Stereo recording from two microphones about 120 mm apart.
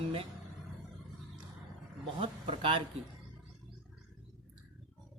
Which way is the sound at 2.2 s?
50° right (ahead or behind).